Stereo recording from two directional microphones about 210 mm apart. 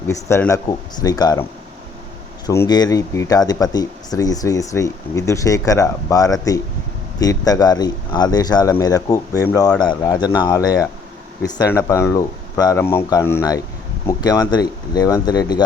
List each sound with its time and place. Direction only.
0.1 s speech: 10° left (ahead or behind)
2.5 s speech: 15° left (ahead or behind)